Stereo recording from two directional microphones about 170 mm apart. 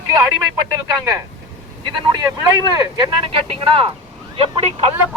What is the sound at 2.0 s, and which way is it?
Speech, 20° right (ahead or behind).